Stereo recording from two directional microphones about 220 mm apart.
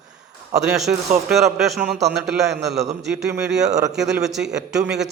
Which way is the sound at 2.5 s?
50° right (ahead or behind).